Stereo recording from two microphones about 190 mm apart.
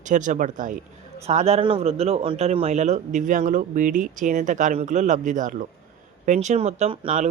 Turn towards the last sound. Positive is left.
turn(degrees=-35)  # may be behind; listen again after turning